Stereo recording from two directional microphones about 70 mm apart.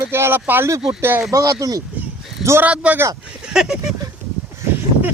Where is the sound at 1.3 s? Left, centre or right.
Right.